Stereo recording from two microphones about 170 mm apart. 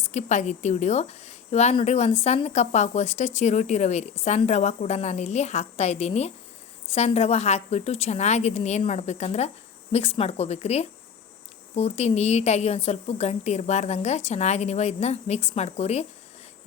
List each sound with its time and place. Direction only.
0.0 s speech: 45° left (ahead or behind)